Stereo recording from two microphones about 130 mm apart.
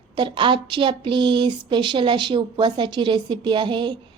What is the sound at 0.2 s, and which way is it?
Speech, 40° right (ahead or behind).